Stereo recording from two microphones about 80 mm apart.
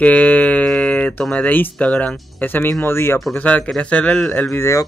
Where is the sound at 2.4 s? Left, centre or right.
Left.